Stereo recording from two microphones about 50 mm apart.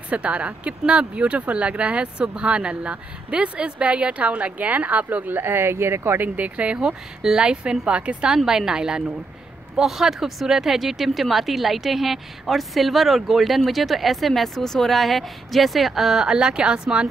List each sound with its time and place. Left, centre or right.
0.1 s speech: right
6.2 s speech: right
8.5 s a woman's voice: centre